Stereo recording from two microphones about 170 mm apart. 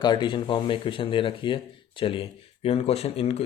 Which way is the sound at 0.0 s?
25° left (ahead or behind).